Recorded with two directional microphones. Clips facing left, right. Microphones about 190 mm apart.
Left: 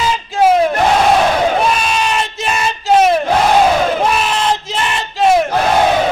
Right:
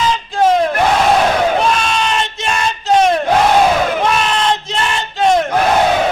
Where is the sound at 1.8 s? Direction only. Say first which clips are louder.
Even; 5° left (ahead or behind).